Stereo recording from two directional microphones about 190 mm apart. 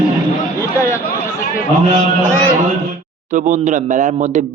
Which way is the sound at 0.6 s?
15° left (ahead or behind).